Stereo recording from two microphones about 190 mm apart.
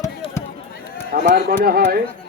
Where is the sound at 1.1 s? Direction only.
55° right (ahead or behind).